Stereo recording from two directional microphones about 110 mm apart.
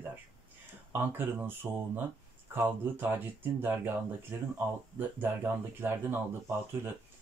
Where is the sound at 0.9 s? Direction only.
20° right (ahead or behind).